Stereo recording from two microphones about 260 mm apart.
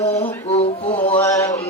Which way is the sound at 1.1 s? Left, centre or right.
Centre.